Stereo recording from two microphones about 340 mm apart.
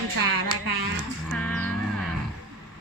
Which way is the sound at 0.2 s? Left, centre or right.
Right.